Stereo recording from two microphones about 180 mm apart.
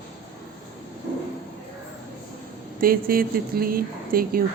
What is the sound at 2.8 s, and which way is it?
A woman's voice, 55° right (ahead or behind).